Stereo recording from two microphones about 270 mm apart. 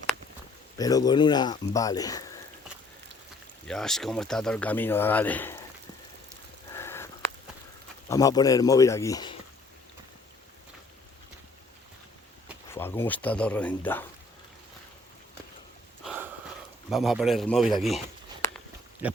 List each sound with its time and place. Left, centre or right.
0.8 s speech: centre
3.7 s speech: centre
6.7 s a sound: centre
8.1 s speech: centre
12.7 s speech: centre
16.0 s a sound: centre
16.9 s speech: centre
19.0 s speech: centre